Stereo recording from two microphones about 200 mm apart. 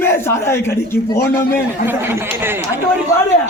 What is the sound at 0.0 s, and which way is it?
A man's voice, 10° left (ahead or behind).